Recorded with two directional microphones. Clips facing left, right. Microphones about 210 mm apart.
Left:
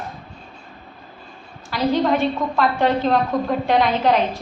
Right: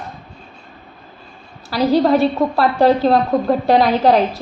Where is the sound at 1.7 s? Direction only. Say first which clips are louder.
Right 5 dB; 35° right (ahead or behind).